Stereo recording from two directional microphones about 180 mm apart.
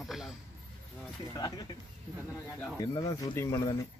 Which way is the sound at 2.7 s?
20° left (ahead or behind).